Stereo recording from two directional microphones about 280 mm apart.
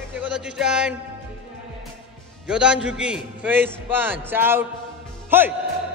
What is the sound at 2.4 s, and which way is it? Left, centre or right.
A man's voice, centre.